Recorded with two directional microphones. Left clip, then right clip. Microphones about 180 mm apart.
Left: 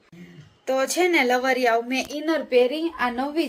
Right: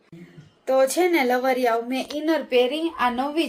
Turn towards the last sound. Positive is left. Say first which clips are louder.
# right 2 dB
turn(degrees=-10)  # may be behind; listen again after turning